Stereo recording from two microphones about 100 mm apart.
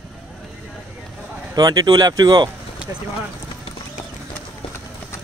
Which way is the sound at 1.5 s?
45° right (ahead or behind).